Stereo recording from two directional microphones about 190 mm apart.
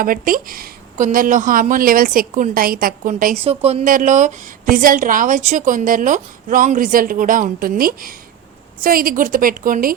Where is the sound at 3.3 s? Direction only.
30° right (ahead or behind).